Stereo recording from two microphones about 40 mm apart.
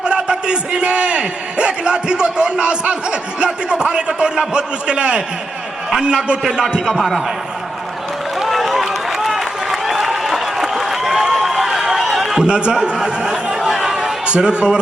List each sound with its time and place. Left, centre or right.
0.0 s a man's voice: right; by 7.1 s centre
8.4 s run: centre
11.3 s a sound: centre
12.5 s a man's voice: right
13.7 s a sound: centre
14.3 s a man's voice: right